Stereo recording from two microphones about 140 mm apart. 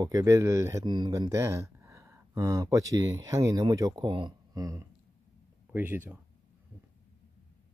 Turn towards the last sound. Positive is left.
turn(degrees=-15)  # may be behind; listen again after turning